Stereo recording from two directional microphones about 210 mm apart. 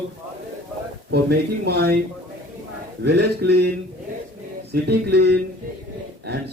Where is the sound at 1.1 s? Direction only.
50° right (ahead or behind).